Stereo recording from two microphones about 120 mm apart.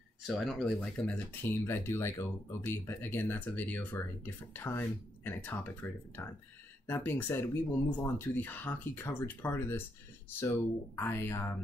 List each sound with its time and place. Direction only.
0.3 s speech: centre (ahead or behind)
0.7 s speech: 15° left (ahead or behind)